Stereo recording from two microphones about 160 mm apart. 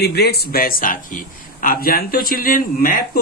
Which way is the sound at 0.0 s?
90° left.